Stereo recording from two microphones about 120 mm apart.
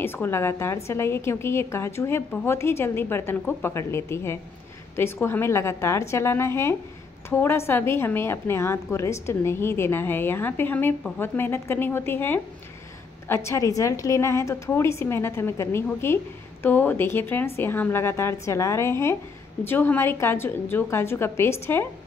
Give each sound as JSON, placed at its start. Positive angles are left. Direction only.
{"t": 0.0, "sound": "a woman's voice", "side_deg": 20}